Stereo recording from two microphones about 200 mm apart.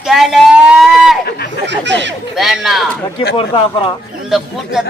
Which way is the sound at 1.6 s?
60° right (ahead or behind).